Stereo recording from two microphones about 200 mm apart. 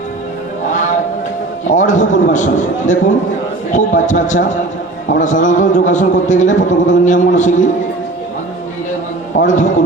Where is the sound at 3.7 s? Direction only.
40° left (ahead or behind).